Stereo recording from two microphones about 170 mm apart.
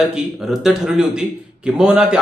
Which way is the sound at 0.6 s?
5° right (ahead or behind).